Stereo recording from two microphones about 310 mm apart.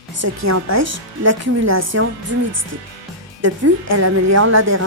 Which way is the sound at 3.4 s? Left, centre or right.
Right.